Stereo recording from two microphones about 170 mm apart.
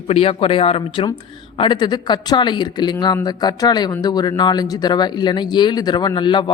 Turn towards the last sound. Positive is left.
turn(degrees=25)  # may be behind; listen again after turning